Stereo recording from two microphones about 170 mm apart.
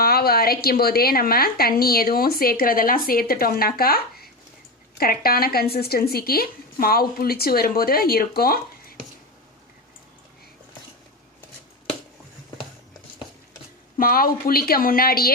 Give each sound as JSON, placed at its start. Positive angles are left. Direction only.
{"t": 0.0, "sound": "a woman's voice", "side_deg": 65}
{"t": 14.0, "sound": "a woman's voice", "side_deg": 60}